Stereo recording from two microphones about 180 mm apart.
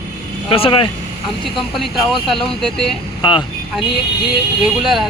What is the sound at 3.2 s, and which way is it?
Speech, 25° left (ahead or behind).